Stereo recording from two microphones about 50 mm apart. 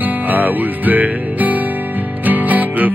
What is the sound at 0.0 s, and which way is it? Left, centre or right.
Music, right.